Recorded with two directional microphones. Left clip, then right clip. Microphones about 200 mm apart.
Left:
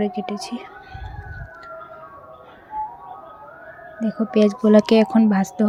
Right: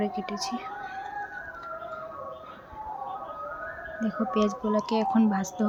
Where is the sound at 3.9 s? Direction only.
20° left (ahead or behind).